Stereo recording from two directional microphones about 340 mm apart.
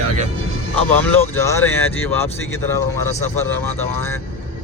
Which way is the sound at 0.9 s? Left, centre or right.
Centre.